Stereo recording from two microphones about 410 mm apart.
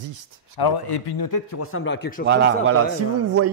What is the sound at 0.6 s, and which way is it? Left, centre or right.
A man's voice, left.